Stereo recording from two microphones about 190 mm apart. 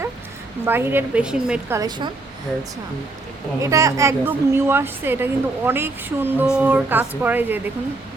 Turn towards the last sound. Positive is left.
turn(degrees=-10)  # may be behind; listen again after turning